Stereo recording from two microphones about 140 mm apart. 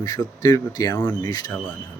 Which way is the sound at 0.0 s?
30° left (ahead or behind).